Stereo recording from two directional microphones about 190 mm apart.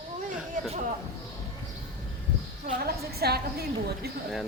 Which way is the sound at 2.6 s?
55° right (ahead or behind).